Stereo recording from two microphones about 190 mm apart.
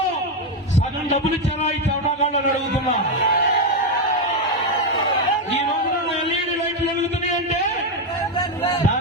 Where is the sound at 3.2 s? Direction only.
65° left (ahead or behind).